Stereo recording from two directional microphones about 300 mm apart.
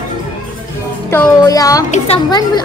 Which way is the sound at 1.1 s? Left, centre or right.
Centre.